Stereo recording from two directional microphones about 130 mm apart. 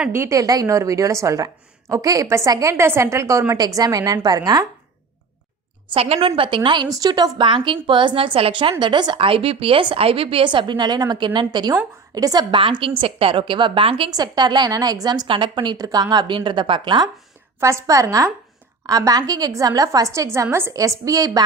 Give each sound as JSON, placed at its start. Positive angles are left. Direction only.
{"t": 0.1, "sound": "a woman's voice", "side_deg": -20}
{"t": 5.9, "sound": "a woman's voice", "side_deg": -50}
{"t": 14.1, "sound": "a woman's voice", "side_deg": -30}
{"t": 17.6, "sound": "a woman's voice", "side_deg": -20}